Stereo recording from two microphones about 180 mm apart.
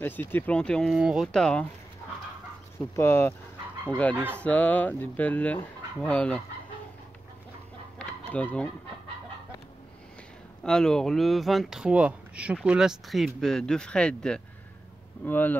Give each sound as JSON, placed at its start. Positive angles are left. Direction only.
{"t": 0.0, "sound": "speech", "side_deg": 10}
{"t": 3.0, "sound": "speech", "side_deg": 15}
{"t": 8.0, "sound": "chicken", "side_deg": 5}
{"t": 10.6, "sound": "speech", "side_deg": 5}